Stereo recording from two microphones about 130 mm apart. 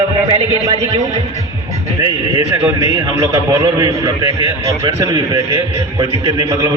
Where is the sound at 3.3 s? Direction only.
25° right (ahead or behind).